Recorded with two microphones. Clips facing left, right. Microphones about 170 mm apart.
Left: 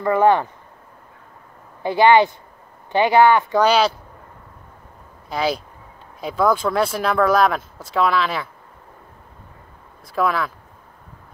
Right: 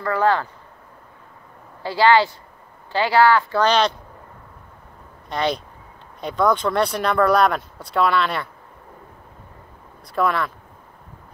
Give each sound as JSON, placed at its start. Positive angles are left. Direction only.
{"t": 0.0, "sound": "speech", "side_deg": 20}
{"t": 1.8, "sound": "speech", "side_deg": 20}
{"t": 3.6, "sound": "speech", "side_deg": 5}
{"t": 5.3, "sound": "speech", "side_deg": 5}
{"t": 10.0, "sound": "speech", "side_deg": 0}